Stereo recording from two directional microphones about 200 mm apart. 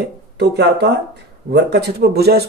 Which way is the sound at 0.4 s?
60° right (ahead or behind).